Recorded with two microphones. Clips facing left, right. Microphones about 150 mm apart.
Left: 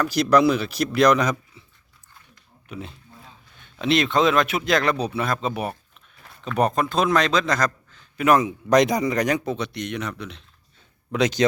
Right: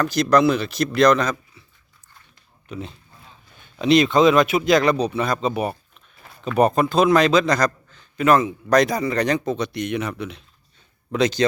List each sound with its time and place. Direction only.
0.0 s speech: 5° left (ahead or behind)
2.6 s a man's voice: 5° left (ahead or behind)
8.3 s speech: 15° left (ahead or behind); by 10.4 s 5° right (ahead or behind)
11.1 s speech: 10° left (ahead or behind)